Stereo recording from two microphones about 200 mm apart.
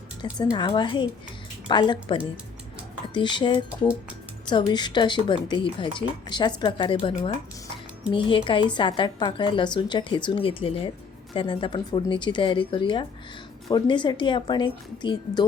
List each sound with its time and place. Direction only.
0.5 s a woman's voice: 20° left (ahead or behind)